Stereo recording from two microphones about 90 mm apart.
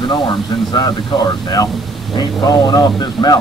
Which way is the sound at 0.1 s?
60° left (ahead or behind).